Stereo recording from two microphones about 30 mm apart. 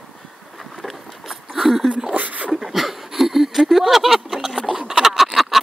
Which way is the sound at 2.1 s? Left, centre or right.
Right.